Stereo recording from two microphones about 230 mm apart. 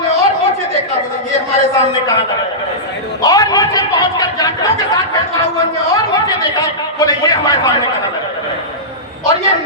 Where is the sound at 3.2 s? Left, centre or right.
Centre.